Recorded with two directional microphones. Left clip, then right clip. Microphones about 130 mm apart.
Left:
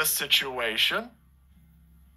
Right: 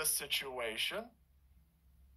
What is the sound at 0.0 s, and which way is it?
Speech, 25° left (ahead or behind).